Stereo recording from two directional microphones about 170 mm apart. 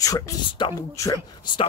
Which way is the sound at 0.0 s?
20° left (ahead or behind).